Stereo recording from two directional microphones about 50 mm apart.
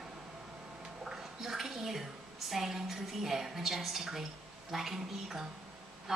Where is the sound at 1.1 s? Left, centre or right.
Centre.